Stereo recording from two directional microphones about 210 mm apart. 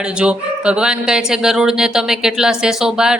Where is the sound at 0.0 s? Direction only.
5° right (ahead or behind).